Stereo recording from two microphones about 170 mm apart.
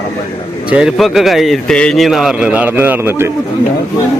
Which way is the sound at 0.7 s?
5° right (ahead or behind).